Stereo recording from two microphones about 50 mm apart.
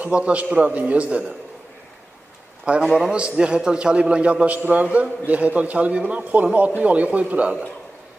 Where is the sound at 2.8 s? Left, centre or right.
Centre.